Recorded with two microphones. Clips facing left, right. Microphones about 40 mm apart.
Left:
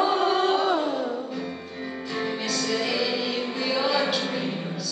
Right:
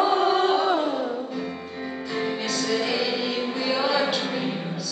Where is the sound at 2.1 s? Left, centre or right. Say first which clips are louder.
Right 1 dB; centre.